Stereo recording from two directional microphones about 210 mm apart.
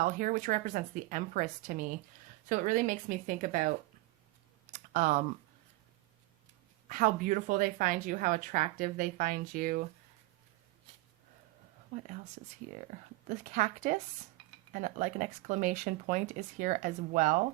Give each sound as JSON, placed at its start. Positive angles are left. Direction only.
{"t": 0.0, "sound": "speech", "side_deg": -40}
{"t": 4.7, "sound": "typing", "side_deg": -40}
{"t": 6.8, "sound": "speech", "side_deg": -40}
{"t": 13.2, "sound": "speech", "side_deg": -35}